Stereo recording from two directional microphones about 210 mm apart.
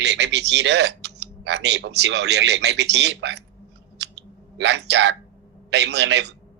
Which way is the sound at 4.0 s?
55° right (ahead or behind).